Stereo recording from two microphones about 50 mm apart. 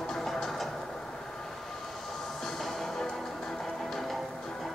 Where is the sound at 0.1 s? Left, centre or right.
Centre.